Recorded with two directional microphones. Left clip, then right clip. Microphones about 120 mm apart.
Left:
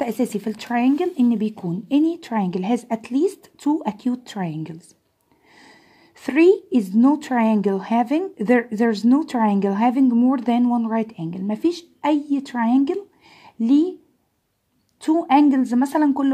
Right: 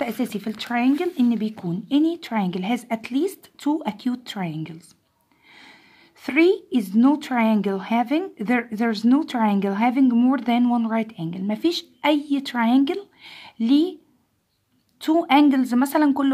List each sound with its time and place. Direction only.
0.2 s speech: 30° left (ahead or behind)
3.5 s speech: 15° left (ahead or behind)
4.4 s speech: 30° left (ahead or behind)
5.5 s a sound: 30° left (ahead or behind)
6.2 s speech: 30° left (ahead or behind)
6.9 s speech: 15° left (ahead or behind)
7.6 s speech: 30° left (ahead or behind)
10.0 s speech: 5° left (ahead or behind)
10.3 s speech: 20° left (ahead or behind)
15.0 s a woman's voice: 10° left (ahead or behind)